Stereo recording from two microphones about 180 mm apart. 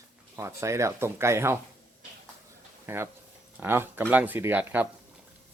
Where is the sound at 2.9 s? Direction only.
10° right (ahead or behind).